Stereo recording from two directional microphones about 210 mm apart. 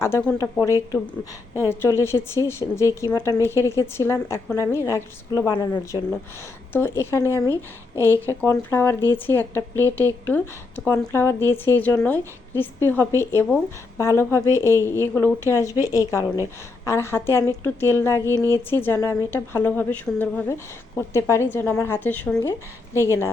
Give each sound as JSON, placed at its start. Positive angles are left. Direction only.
{"t": 0.0, "sound": "speech", "side_deg": 10}
{"t": 7.4, "sound": "a woman's voice", "side_deg": -15}
{"t": 8.3, "sound": "speech", "side_deg": 10}